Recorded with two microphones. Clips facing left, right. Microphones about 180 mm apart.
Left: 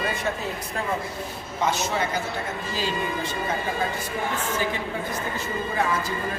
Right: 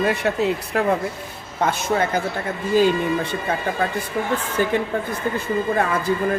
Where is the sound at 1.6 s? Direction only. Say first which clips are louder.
Right 4 dB; 55° right (ahead or behind).